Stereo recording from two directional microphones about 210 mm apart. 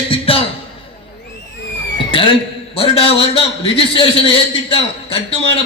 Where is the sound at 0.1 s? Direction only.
25° left (ahead or behind).